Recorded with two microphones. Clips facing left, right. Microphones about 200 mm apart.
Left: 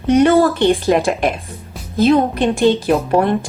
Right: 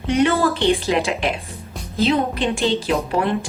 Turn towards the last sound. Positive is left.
turn(degrees=55)  # may be behind; listen again after turning